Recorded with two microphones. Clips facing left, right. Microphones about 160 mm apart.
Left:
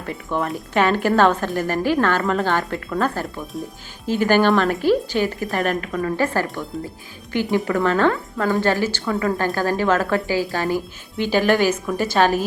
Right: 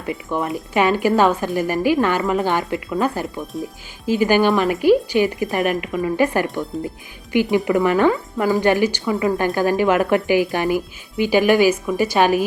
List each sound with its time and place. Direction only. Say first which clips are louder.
0.0 s speech: right 1 dB; 15° right (ahead or behind)
0.4 s speech: right 1 dB; centre (ahead or behind)
3.3 s speech: right 2 dB; centre (ahead or behind)